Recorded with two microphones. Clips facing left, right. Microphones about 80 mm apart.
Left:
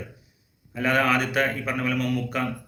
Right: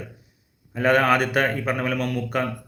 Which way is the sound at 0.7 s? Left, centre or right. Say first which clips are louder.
Right 4 dB; right.